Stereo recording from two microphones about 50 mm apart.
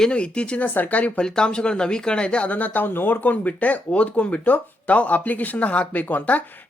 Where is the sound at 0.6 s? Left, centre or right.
Left.